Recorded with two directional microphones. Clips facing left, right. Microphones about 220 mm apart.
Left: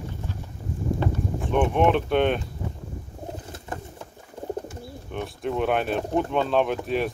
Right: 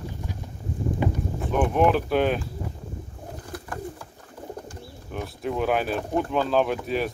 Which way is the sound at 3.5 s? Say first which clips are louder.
Right 2 dB; 25° left (ahead or behind).